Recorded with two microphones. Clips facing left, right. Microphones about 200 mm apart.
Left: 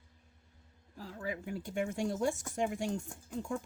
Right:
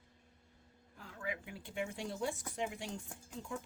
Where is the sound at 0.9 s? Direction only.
35° left (ahead or behind).